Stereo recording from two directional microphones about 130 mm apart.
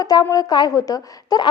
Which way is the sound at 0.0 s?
30° left (ahead or behind).